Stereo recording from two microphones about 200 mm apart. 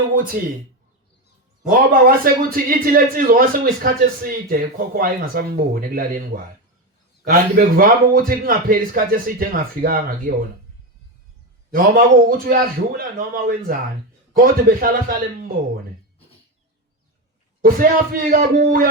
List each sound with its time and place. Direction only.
0.4 s a man's voice: 45° right (ahead or behind)
1.9 s a man's voice: 45° right (ahead or behind)
11.7 s a man's voice: 45° right (ahead or behind)
17.6 s a man's voice: 45° right (ahead or behind)